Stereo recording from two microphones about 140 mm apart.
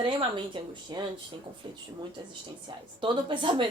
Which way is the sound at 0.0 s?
40° right (ahead or behind).